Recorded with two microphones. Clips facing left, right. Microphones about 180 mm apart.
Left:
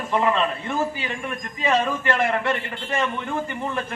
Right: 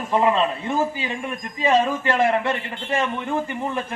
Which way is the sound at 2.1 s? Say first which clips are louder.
Right 5 dB; 15° right (ahead or behind).